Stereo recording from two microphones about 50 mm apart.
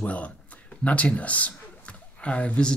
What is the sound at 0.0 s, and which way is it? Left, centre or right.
Speech, left.